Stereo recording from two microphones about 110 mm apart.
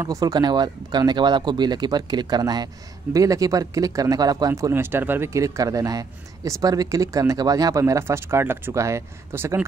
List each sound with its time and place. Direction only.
0.0 s speech: 30° right (ahead or behind)